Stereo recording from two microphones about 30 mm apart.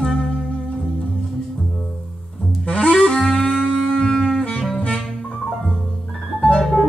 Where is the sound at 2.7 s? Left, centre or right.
Left.